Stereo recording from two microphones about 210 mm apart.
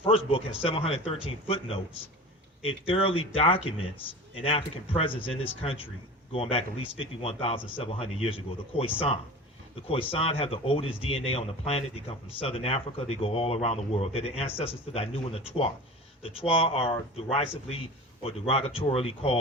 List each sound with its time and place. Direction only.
0.1 s speech: 25° left (ahead or behind)